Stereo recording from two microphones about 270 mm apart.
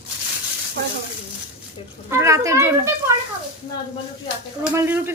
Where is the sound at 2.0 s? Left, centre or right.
Centre.